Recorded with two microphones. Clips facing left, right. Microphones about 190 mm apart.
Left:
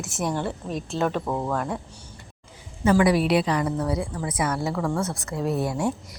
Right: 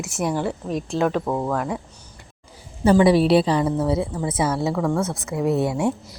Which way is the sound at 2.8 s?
25° right (ahead or behind).